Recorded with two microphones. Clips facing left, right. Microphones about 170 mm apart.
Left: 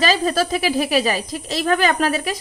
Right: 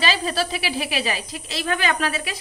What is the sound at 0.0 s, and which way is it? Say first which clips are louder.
Speech: left 5 dB; 45° left (ahead or behind).